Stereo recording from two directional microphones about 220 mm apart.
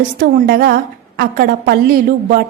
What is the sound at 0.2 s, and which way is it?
A woman's voice, 45° right (ahead or behind).